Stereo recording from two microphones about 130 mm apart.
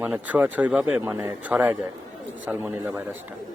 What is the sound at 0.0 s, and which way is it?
A man's voice, 10° right (ahead or behind).